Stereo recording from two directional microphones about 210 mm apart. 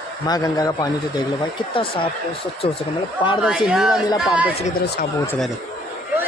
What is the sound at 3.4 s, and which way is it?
Speech, 5° right (ahead or behind).